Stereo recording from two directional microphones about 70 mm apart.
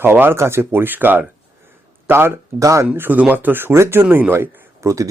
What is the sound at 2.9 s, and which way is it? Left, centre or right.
Speech, right.